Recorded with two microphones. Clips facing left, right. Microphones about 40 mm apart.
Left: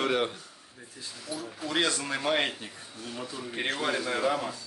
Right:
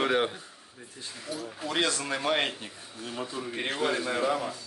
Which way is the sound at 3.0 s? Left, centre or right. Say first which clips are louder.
Right 3 dB; centre.